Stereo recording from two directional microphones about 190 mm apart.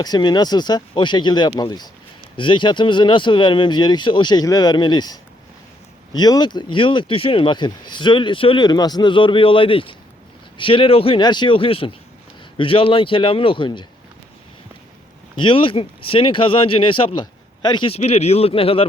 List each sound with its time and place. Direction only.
0.0 s speech: 20° left (ahead or behind)
15.4 s speech: 25° left (ahead or behind)